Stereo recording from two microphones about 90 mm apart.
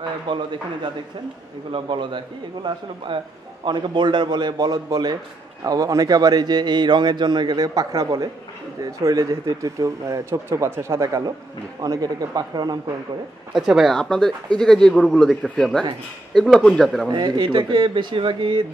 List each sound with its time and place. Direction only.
0.3 s speech: 65° right (ahead or behind)
1.7 s a man's voice: 65° right (ahead or behind); by 12.9 s 45° right (ahead or behind)
13.5 s speech: 5° right (ahead or behind)
17.1 s speech: 60° right (ahead or behind); by 18.7 s 75° right (ahead or behind)